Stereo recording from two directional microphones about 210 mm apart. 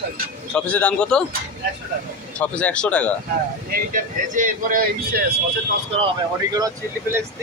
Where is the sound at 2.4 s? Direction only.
5° left (ahead or behind).